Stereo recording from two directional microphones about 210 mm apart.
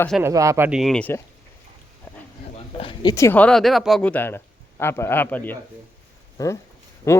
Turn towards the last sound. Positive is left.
turn(degrees=15)  # may be behind; listen again after turning